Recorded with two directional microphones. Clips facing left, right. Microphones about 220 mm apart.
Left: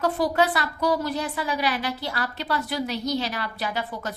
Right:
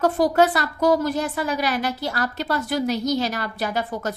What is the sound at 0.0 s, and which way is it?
A woman's voice, 45° right (ahead or behind).